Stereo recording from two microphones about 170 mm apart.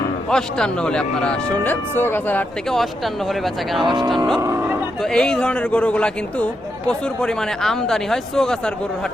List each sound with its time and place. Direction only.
0.3 s speech: 5° left (ahead or behind)
4.4 s speech: 15° right (ahead or behind)
5.0 s speech: 5° left (ahead or behind)